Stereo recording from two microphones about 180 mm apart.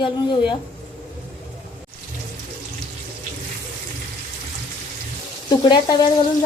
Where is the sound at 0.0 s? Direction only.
25° left (ahead or behind).